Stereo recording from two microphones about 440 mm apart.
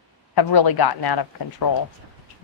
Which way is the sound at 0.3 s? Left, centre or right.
Left.